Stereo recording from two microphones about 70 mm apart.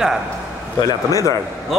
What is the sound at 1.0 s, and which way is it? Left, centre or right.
Speech, left.